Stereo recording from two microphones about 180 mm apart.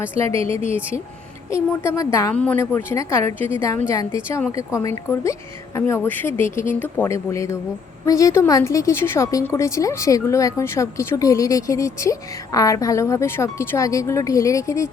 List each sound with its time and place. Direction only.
0.0 s a woman's voice: 15° left (ahead or behind)